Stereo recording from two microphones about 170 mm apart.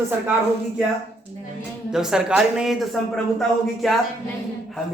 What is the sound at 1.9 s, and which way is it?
Speech, 5° right (ahead or behind).